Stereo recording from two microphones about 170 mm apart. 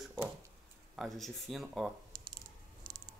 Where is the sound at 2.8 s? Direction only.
25° right (ahead or behind).